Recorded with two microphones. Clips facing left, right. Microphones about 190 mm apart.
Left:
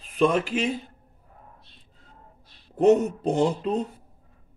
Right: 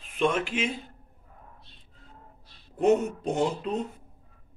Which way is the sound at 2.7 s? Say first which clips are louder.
Left 4 dB; 40° left (ahead or behind).